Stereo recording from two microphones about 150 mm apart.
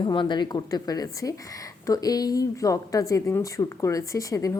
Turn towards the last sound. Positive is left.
turn(degrees=20)  # may be behind; listen again after turning